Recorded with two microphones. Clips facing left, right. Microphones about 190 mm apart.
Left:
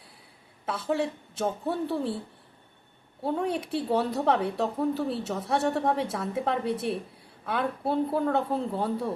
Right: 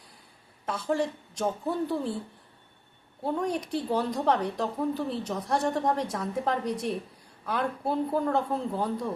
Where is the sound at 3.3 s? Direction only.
5° left (ahead or behind).